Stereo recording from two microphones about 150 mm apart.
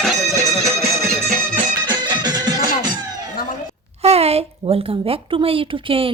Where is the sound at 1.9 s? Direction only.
30° right (ahead or behind).